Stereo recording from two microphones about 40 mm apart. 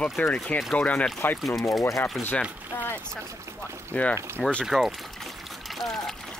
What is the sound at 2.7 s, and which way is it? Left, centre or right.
Boat, left.